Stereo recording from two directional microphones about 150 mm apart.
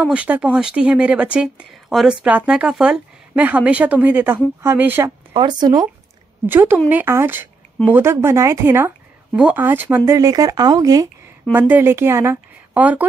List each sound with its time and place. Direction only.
0.0 s speech: 10° right (ahead or behind)
5.3 s speech: 30° right (ahead or behind)
6.4 s speech: 15° right (ahead or behind)
11.5 s speech: 15° right (ahead or behind)